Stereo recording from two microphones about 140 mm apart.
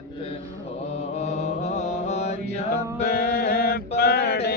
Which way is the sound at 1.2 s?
55° left (ahead or behind).